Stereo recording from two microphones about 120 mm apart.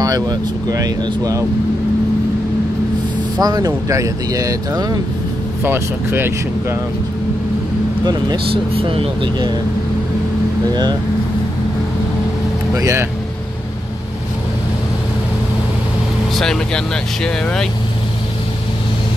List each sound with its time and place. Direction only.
0.0 s speech: 30° right (ahead or behind)
3.3 s speech: 30° right (ahead or behind)
5.6 s speech: 20° right (ahead or behind)
8.0 s speech: 35° right (ahead or behind)
8.7 s speech: 50° right (ahead or behind)
10.7 s speech: 35° right (ahead or behind)
12.7 s speech: 25° right (ahead or behind)
16.3 s speech: 5° left (ahead or behind)